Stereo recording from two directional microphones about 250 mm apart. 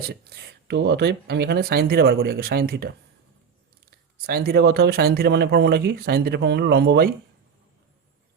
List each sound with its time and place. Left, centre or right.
0.1 s speech: right